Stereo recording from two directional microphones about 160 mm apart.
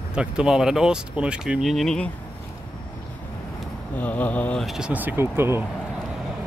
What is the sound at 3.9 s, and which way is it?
Speech, 10° left (ahead or behind).